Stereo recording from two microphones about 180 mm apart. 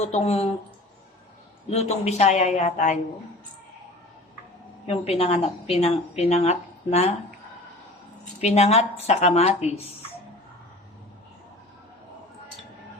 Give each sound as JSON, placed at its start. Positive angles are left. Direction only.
{"t": 0.1, "sound": "a woman's voice", "side_deg": 35}
{"t": 1.7, "sound": "a woman's voice", "side_deg": 35}
{"t": 4.9, "sound": "a woman's voice", "side_deg": 35}
{"t": 8.4, "sound": "a woman's voice", "side_deg": 35}